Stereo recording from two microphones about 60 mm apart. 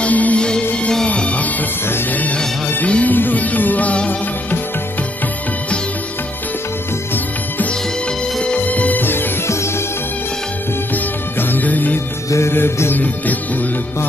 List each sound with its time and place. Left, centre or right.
0.0 s music: left
2.9 s music: left
8.5 s music: left
11.3 s music: left
12.3 s music: left
12.9 s music: left